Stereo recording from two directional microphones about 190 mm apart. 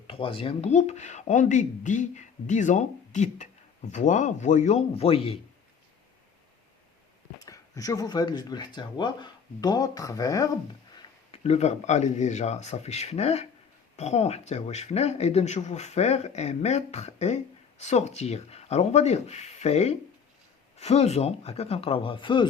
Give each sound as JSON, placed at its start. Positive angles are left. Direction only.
{"t": 0.1, "sound": "speech", "side_deg": 30}
{"t": 7.3, "sound": "speech", "side_deg": 20}
{"t": 11.4, "sound": "speech", "side_deg": 35}